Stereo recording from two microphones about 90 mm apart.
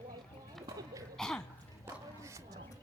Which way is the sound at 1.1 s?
5° left (ahead or behind).